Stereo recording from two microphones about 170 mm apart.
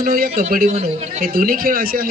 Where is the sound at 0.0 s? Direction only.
60° right (ahead or behind).